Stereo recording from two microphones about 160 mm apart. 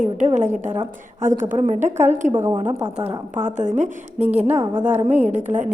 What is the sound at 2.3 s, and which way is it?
Speech, 15° right (ahead or behind).